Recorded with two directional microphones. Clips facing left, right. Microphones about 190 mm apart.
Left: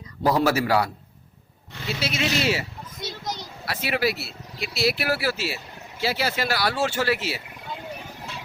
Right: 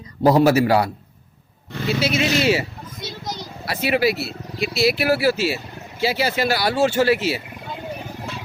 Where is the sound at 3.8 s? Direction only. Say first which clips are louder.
Right 7 dB; centre (ahead or behind).